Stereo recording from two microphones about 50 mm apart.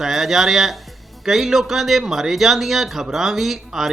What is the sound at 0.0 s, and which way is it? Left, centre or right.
Speech, centre.